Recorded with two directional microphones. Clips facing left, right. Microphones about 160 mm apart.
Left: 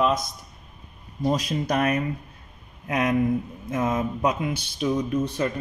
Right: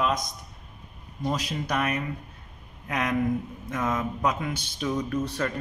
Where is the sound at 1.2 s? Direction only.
35° left (ahead or behind).